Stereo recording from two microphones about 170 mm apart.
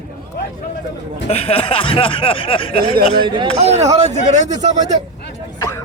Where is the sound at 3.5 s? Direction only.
40° right (ahead or behind).